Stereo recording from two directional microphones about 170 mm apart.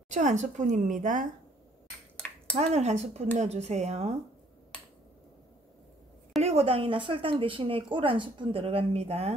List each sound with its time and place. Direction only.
0.1 s a woman's voice: 45° right (ahead or behind)
2.1 s a sound: 5° left (ahead or behind)
2.5 s speech: 40° right (ahead or behind)
6.4 s speech: 35° right (ahead or behind)